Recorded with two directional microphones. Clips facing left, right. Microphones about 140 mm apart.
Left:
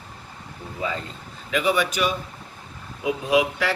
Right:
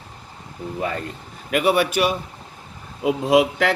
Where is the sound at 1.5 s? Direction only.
55° right (ahead or behind).